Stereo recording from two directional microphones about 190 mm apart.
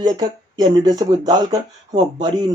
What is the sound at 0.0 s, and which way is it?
Speech, 20° right (ahead or behind).